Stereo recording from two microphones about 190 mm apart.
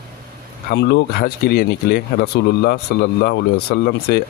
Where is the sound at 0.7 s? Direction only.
60° left (ahead or behind).